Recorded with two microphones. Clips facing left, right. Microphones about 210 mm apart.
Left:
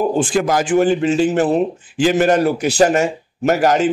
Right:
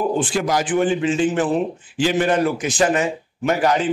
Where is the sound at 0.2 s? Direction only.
50° left (ahead or behind).